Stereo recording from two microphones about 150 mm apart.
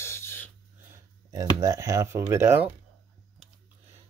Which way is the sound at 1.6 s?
20° right (ahead or behind).